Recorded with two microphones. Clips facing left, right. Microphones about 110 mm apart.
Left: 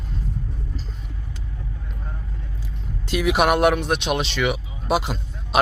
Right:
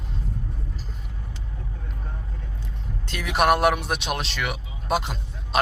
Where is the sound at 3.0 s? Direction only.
10° left (ahead or behind).